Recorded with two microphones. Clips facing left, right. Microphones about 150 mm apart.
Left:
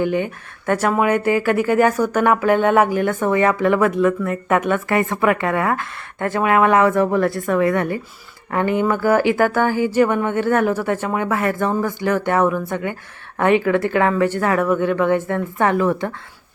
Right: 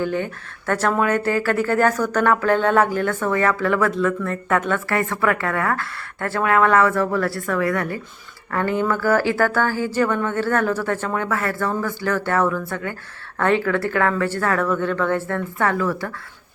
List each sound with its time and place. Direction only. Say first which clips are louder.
0.0 s speech: left 3 dB; 15° left (ahead or behind)